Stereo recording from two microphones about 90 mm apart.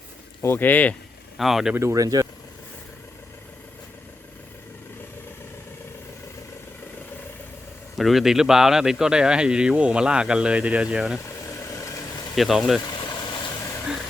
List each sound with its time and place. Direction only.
0.4 s speech: 25° left (ahead or behind)
1.4 s speech: 5° right (ahead or behind)
1.7 s speech: 35° right (ahead or behind)
7.9 s speech: centre (ahead or behind)
11.8 s vehicle: 35° left (ahead or behind)
12.4 s speech: centre (ahead or behind)
12.9 s vehicle: 55° left (ahead or behind)